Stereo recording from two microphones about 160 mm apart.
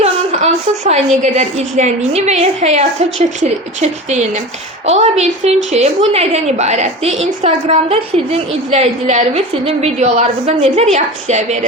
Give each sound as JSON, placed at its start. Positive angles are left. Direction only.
{"t": 0.0, "sound": "a woman's voice", "side_deg": -45}